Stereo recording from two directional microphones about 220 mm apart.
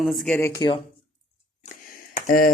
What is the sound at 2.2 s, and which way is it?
Speech, 40° left (ahead or behind).